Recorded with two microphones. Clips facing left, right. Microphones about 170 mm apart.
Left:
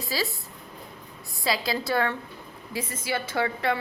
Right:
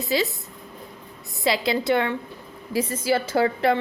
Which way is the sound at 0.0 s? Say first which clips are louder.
Right 6 dB; 20° right (ahead or behind).